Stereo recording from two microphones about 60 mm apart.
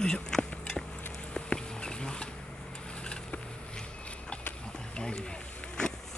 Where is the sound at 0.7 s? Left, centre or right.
Centre.